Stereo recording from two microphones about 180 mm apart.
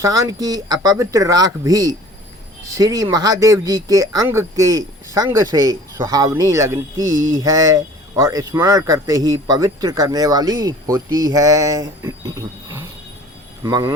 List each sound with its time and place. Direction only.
0.0 s speech: 20° right (ahead or behind)
13.6 s speech: 20° right (ahead or behind)